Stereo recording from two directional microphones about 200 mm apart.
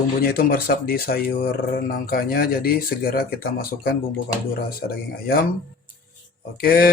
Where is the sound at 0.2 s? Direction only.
45° left (ahead or behind).